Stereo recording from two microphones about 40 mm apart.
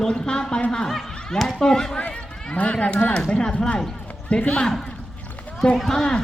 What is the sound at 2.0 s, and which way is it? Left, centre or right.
Speech, left.